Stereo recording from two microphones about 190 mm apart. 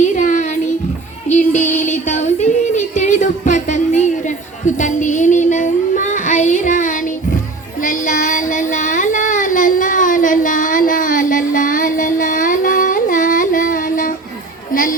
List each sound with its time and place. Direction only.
0.0 s child singing: 40° left (ahead or behind)
1.8 s music: 40° left (ahead or behind)
7.8 s child singing: 45° left (ahead or behind)
14.7 s a sound: 45° left (ahead or behind)